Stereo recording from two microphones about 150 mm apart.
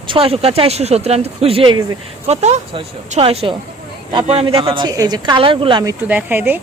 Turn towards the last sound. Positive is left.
turn(degrees=-10)  # may be behind; listen again after turning